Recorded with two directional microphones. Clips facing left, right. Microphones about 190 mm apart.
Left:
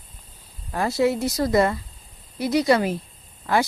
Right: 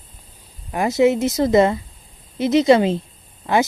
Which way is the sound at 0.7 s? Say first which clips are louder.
Right 5 dB; 20° right (ahead or behind).